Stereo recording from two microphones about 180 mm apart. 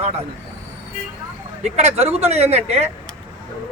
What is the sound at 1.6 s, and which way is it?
A man's voice, 35° right (ahead or behind).